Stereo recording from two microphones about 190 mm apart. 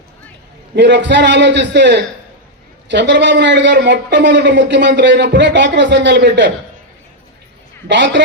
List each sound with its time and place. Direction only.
0.8 s a man's voice: 65° right (ahead or behind)
7.9 s speech: 65° right (ahead or behind)